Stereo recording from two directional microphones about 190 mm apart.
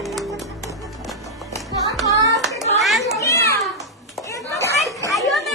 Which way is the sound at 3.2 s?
15° left (ahead or behind).